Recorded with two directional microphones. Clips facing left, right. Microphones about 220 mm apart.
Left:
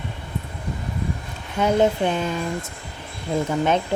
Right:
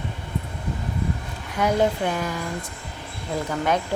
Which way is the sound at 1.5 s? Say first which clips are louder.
Left 3 dB; 25° left (ahead or behind).